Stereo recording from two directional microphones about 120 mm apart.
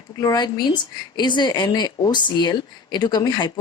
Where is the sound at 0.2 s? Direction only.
35° left (ahead or behind).